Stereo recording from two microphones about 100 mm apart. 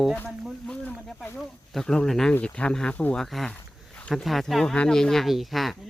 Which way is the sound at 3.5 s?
15° left (ahead or behind).